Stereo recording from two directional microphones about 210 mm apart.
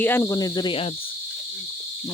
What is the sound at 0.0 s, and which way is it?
Cricket, 10° left (ahead or behind).